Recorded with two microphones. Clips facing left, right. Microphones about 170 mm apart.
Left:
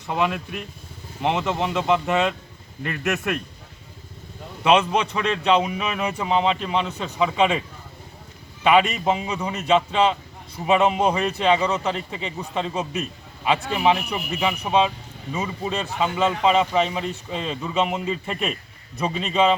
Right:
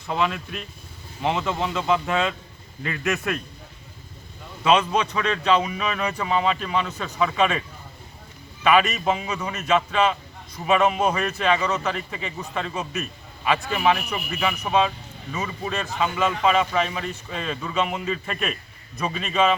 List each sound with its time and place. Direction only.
0.1 s speech: 10° left (ahead or behind)
2.8 s speech: 15° left (ahead or behind)
4.6 s a man's voice: 20° left (ahead or behind)
6.2 s a man's voice: 20° left (ahead or behind)
8.6 s a man's voice: 20° left (ahead or behind)